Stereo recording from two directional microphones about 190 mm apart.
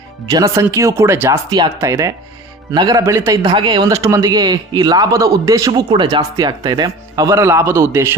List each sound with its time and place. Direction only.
0.3 s speech: 20° right (ahead or behind)